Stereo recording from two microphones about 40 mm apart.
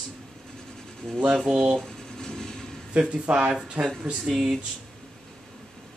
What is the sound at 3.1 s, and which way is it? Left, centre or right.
Speech, right.